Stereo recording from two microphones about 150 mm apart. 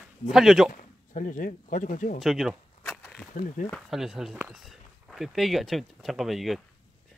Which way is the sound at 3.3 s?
65° left (ahead or behind).